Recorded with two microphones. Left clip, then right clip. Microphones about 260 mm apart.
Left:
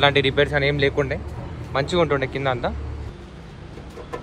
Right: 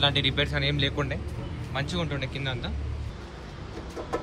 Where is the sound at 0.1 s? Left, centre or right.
Centre.